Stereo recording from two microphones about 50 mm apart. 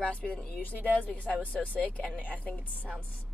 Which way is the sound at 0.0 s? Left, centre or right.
Left.